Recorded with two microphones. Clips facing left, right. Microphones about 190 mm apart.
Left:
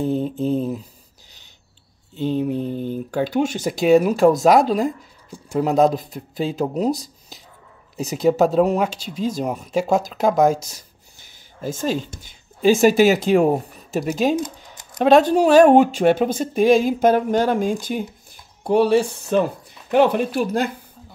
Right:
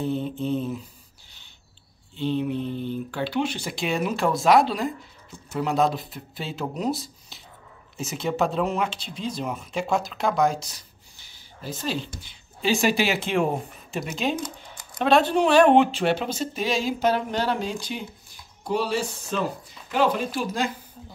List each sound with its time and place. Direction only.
0.0 s speech: 40° left (ahead or behind)
2.1 s speech: 45° left (ahead or behind)